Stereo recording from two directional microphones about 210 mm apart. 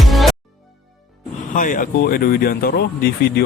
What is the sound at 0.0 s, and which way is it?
Music, centre (ahead or behind).